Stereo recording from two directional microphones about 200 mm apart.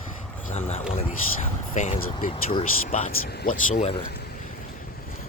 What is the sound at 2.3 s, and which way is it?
Speech, 25° left (ahead or behind).